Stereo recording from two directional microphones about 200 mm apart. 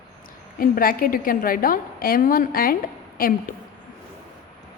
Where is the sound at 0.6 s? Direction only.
45° left (ahead or behind).